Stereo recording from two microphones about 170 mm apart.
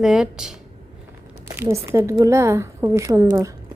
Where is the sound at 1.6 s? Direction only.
15° right (ahead or behind).